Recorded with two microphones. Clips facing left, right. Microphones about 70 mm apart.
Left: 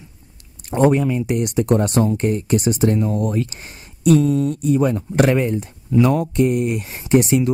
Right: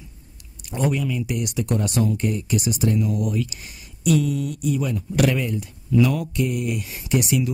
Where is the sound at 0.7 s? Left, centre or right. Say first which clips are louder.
Left 8 dB; left.